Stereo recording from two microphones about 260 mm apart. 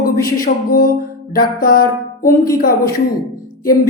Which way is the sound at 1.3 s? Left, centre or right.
Left.